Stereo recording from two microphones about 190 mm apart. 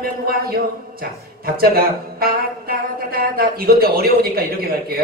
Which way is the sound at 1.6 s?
50° right (ahead or behind).